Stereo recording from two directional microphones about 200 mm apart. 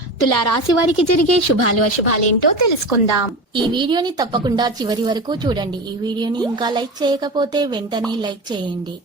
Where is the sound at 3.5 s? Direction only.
25° right (ahead or behind).